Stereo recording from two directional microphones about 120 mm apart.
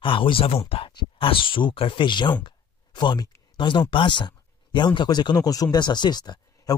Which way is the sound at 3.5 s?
40° left (ahead or behind).